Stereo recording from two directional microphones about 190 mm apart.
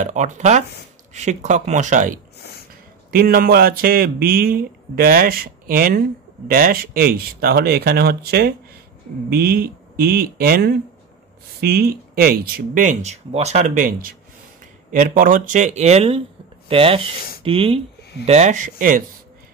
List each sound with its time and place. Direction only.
0.0 s speech: 40° right (ahead or behind)